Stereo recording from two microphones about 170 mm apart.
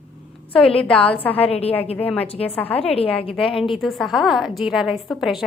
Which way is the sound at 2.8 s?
35° left (ahead or behind).